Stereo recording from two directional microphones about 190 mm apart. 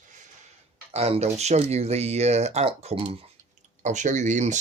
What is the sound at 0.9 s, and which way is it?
Speech, 35° right (ahead or behind).